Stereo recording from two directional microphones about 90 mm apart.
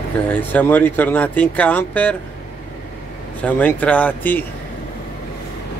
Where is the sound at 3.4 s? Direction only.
15° left (ahead or behind).